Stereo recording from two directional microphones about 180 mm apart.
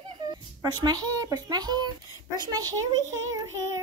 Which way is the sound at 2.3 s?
20° right (ahead or behind).